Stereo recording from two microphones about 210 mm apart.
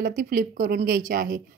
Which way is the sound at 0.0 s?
40° right (ahead or behind).